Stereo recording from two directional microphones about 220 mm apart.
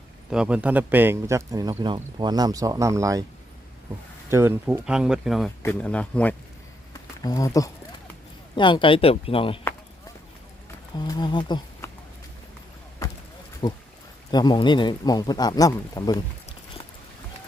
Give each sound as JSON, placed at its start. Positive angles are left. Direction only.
{"t": 0.3, "sound": "speech", "side_deg": -5}
{"t": 4.3, "sound": "speech", "side_deg": -10}
{"t": 6.9, "sound": "a sound", "side_deg": 15}
{"t": 8.5, "sound": "speech", "side_deg": 20}
{"t": 10.9, "sound": "speech", "side_deg": 20}
{"t": 13.6, "sound": "speech", "side_deg": 20}